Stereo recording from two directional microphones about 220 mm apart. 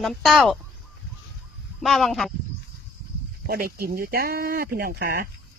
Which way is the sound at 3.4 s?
45° right (ahead or behind).